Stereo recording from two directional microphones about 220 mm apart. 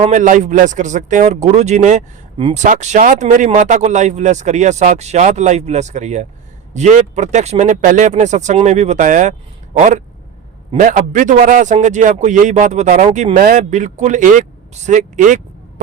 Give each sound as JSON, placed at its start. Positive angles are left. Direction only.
{"t": 0.0, "sound": "speech", "side_deg": -35}